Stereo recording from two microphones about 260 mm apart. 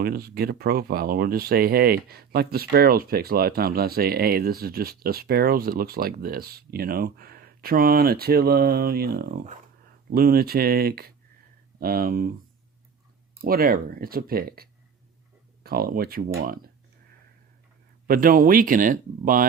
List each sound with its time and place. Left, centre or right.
0.0 s speech: right
13.4 s speech: right
18.1 s speech: right